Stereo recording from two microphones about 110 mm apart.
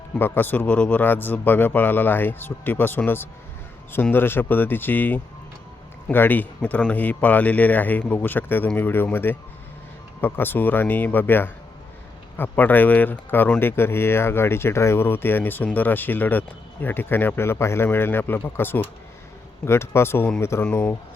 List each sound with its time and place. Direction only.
0.2 s speech: 20° left (ahead or behind)